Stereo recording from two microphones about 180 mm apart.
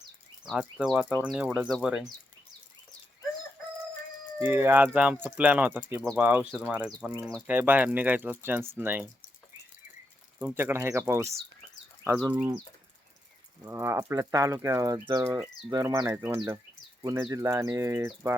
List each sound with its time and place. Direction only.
0.5 s speech: 5° right (ahead or behind)
4.4 s speech: 10° right (ahead or behind)
10.4 s speech: 15° right (ahead or behind)
13.7 s speech: 15° right (ahead or behind)
17.0 s speech: 20° right (ahead or behind)